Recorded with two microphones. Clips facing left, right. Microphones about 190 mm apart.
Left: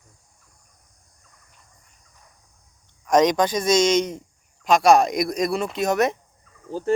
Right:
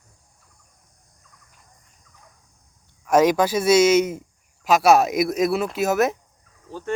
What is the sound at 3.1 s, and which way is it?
Speech, 5° right (ahead or behind).